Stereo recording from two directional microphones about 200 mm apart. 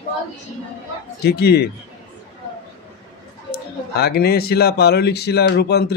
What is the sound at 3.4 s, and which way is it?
Speech, 55° left (ahead or behind).